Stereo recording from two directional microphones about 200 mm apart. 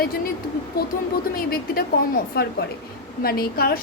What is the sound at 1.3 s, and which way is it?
A woman's voice, 50° left (ahead or behind).